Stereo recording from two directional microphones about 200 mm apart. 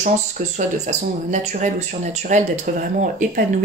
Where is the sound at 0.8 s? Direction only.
40° right (ahead or behind).